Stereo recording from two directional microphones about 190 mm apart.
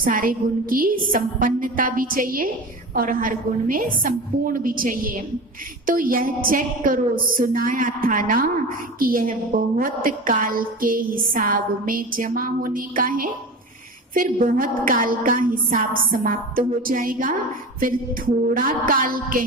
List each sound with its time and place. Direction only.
0.0 s a woman's voice: 45° right (ahead or behind)